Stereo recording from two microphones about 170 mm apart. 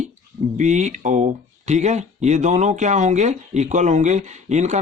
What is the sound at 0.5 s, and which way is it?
Speech, 45° right (ahead or behind).